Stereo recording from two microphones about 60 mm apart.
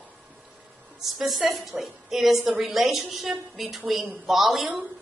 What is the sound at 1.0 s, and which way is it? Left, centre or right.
A woman's voice, centre.